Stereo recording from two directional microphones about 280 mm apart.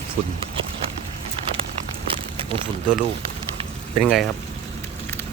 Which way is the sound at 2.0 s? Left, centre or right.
Centre.